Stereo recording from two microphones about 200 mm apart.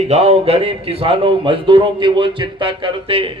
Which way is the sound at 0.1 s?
30° right (ahead or behind).